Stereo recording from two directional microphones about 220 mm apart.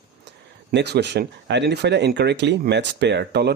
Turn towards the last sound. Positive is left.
turn(degrees=-50)  # may be behind; listen again after turning